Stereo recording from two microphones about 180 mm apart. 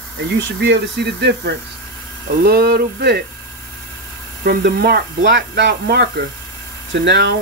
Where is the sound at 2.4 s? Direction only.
60° right (ahead or behind).